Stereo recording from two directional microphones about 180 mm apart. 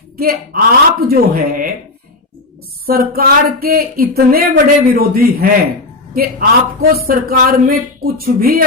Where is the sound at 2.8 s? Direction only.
55° right (ahead or behind).